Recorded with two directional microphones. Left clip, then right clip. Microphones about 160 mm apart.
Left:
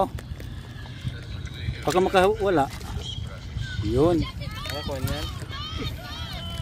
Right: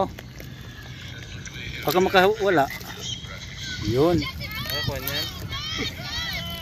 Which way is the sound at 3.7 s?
35° left (ahead or behind).